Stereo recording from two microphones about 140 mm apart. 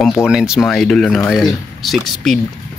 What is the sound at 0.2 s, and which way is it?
Speech, 5° right (ahead or behind).